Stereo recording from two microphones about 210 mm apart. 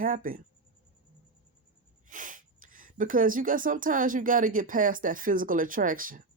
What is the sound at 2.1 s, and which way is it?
Speech, 40° right (ahead or behind).